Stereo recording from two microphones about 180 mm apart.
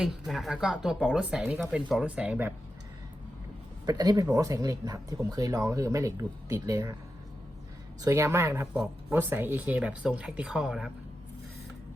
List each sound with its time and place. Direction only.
0.0 s speech: centre (ahead or behind)
3.8 s speech: 20° right (ahead or behind)
8.0 s speech: 15° right (ahead or behind)